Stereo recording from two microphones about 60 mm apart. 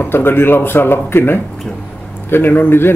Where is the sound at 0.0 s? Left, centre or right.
Left.